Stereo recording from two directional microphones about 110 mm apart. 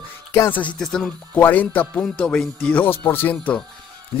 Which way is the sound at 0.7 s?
10° left (ahead or behind).